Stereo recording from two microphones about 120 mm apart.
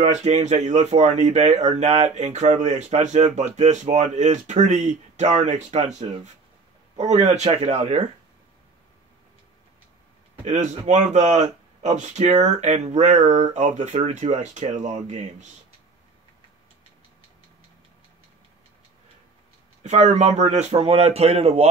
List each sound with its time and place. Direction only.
0.0 s speech: 70° right (ahead or behind)
10.4 s speech: 75° right (ahead or behind)
19.8 s a man's voice: 70° right (ahead or behind)